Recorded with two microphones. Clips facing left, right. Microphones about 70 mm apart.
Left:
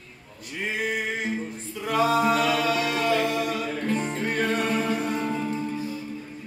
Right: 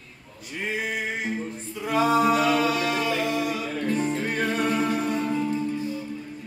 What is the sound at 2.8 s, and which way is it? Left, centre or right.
Music, centre.